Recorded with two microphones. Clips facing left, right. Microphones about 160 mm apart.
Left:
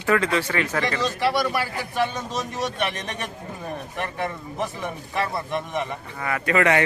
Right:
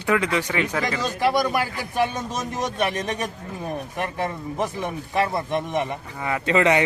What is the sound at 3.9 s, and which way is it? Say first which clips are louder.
A man's voice: even; 15° right (ahead or behind).